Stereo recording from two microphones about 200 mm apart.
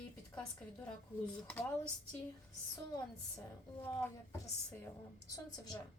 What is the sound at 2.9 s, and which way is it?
A woman's voice, 10° left (ahead or behind).